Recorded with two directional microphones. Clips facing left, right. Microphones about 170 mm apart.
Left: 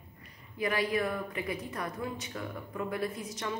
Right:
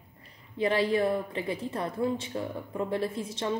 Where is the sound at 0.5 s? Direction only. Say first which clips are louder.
Right 5 dB; 30° right (ahead or behind).